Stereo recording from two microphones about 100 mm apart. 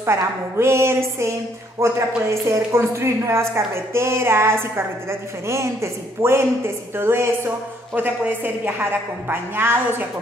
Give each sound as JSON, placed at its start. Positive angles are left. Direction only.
{"t": 0.0, "sound": "a woman's voice", "side_deg": -25}